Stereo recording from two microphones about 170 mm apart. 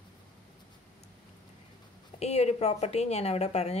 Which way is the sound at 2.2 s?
40° left (ahead or behind).